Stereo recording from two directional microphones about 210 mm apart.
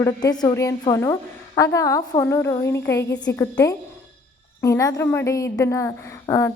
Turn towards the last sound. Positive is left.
turn(degrees=15)  # may be behind; listen again after turning